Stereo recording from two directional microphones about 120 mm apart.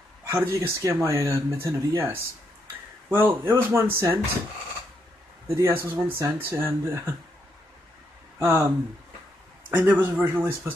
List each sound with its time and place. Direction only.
0.3 s speech: 20° right (ahead or behind)
5.5 s speech: 20° right (ahead or behind)
8.4 s speech: 25° right (ahead or behind)